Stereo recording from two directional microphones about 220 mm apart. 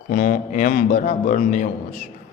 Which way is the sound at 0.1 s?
40° left (ahead or behind).